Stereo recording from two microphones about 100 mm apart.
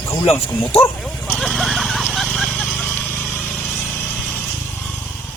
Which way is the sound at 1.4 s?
Centre (ahead or behind).